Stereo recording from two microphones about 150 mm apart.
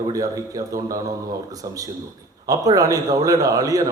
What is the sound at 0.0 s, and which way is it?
A man's voice, 25° right (ahead or behind).